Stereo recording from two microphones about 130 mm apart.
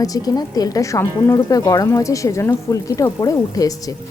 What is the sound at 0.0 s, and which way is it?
Speech, 30° left (ahead or behind).